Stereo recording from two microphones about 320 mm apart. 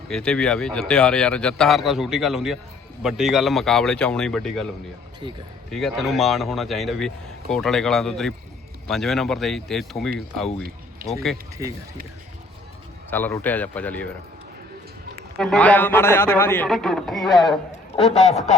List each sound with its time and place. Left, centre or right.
0.1 s speech: centre
5.2 s speech: centre
5.7 s speech: centre
11.6 s speech: centre
13.1 s speech: centre
15.4 s speech: centre
17.9 s a man's voice: centre